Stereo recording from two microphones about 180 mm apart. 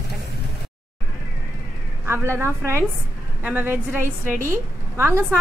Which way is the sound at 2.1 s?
15° right (ahead or behind).